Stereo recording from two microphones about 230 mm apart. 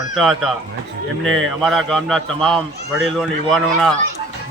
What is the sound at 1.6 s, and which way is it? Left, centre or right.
A man's voice, centre.